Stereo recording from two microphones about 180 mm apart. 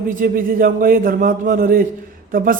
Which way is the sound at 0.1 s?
50° right (ahead or behind).